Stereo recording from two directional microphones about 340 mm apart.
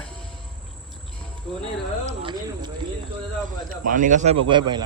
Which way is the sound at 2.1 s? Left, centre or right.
Centre.